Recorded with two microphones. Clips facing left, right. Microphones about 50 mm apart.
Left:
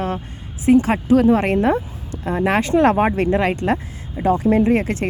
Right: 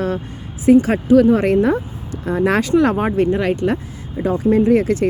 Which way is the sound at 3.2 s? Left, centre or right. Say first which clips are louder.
Right 2 dB; left.